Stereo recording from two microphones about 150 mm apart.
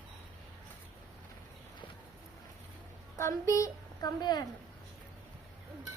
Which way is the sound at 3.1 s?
20° left (ahead or behind).